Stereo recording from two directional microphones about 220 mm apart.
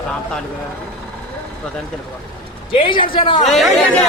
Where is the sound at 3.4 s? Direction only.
Centre (ahead or behind).